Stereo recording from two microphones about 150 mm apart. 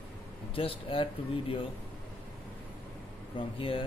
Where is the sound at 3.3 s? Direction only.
35° left (ahead or behind).